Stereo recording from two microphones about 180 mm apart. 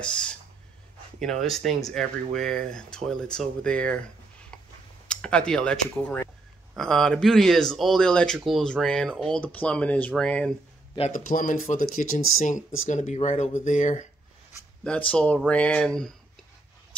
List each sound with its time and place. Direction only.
0.0 s speech: 5° left (ahead or behind)
5.0 s speech: 5° left (ahead or behind)
11.0 s speech: 45° left (ahead or behind)
14.8 s speech: 5° left (ahead or behind)